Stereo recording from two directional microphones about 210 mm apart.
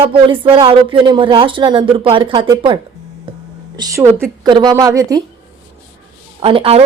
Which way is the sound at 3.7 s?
15° right (ahead or behind).